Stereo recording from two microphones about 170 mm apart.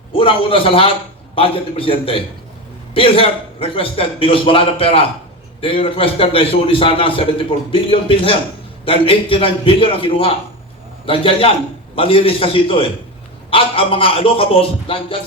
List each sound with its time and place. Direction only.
0.1 s a man's voice: 30° left (ahead or behind)